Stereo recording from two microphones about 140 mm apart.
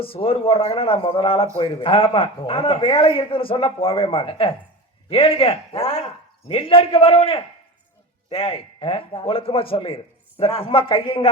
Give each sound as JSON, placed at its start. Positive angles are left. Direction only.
{"t": 0.0, "sound": "a man's voice", "side_deg": 40}